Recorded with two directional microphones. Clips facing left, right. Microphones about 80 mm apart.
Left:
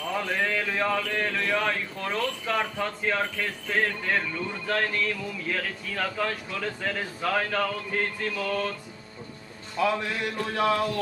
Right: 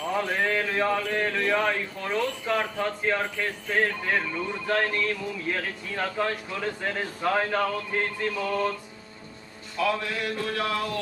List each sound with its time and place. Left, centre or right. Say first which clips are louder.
0.0 s mantra: right 2 dB; centre
8.4 s music: right 2 dB; right
9.8 s a man's voice: left 1 dB; left